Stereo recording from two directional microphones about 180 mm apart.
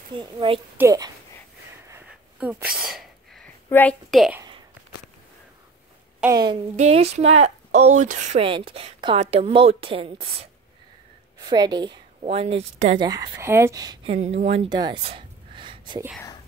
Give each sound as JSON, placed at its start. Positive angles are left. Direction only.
{"t": 0.1, "sound": "a woman's voice", "side_deg": -30}
{"t": 1.9, "sound": "sneeze", "side_deg": -10}
{"t": 3.6, "sound": "a woman's voice", "side_deg": 10}
{"t": 4.1, "sound": "speech", "side_deg": 0}
{"t": 6.2, "sound": "a woman's voice", "side_deg": -20}
{"t": 6.8, "sound": "a woman's voice", "side_deg": -35}
{"t": 8.5, "sound": "a woman's voice", "side_deg": -30}
{"t": 13.0, "sound": "a woman's voice", "side_deg": -20}
{"t": 14.1, "sound": "a woman's voice", "side_deg": -35}
{"t": 14.7, "sound": "a sound", "side_deg": -25}